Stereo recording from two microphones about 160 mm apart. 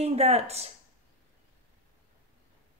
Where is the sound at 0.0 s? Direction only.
40° right (ahead or behind).